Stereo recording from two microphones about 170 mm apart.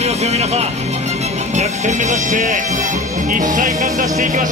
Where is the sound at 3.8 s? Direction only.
50° right (ahead or behind).